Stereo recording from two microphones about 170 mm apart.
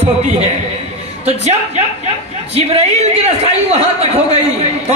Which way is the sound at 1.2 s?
40° right (ahead or behind).